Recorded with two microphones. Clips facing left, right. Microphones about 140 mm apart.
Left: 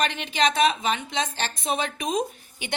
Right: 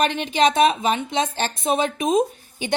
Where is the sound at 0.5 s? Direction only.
25° right (ahead or behind).